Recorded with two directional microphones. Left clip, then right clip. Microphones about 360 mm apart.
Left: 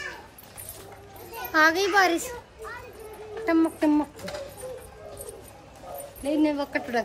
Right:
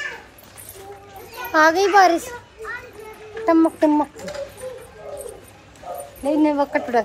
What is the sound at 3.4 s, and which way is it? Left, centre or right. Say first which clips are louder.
Speech: right 7 dB; centre.